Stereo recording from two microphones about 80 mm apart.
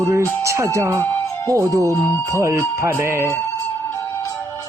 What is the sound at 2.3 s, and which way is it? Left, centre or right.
Speech, right.